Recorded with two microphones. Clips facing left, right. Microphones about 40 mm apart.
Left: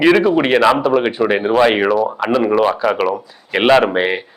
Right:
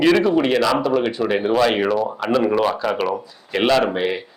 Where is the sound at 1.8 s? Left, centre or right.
Centre.